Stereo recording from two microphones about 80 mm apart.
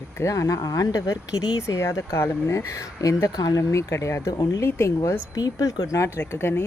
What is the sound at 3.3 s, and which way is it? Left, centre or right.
Speech, left.